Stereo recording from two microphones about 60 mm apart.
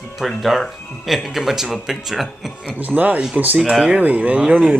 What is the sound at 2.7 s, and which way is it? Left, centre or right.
Speech, right.